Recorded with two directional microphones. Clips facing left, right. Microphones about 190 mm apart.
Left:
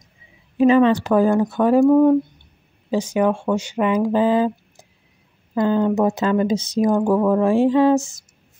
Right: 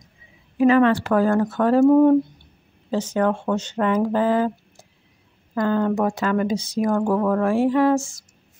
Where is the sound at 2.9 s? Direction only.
10° left (ahead or behind).